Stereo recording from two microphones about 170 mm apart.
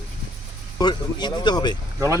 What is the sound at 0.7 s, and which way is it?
Speech, 25° left (ahead or behind).